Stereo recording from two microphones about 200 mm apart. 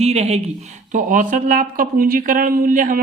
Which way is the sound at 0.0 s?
30° right (ahead or behind).